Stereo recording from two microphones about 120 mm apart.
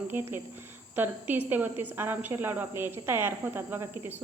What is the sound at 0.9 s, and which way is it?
Speech, 15° right (ahead or behind).